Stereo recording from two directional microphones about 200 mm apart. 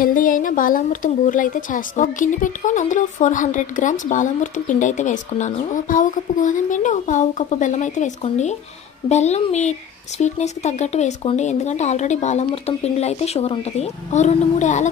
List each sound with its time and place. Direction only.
0.0 s speech: 45° left (ahead or behind)